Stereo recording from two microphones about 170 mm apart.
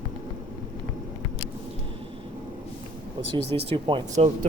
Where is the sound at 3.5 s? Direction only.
35° right (ahead or behind).